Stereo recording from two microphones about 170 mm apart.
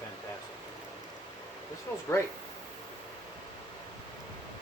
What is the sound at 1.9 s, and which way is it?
Speech, 15° left (ahead or behind).